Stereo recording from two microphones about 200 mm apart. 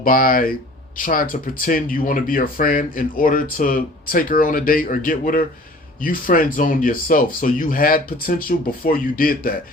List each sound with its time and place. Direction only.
0.0 s speech: 45° left (ahead or behind)